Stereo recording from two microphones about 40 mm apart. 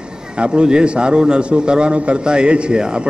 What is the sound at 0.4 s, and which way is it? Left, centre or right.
A man's voice, right.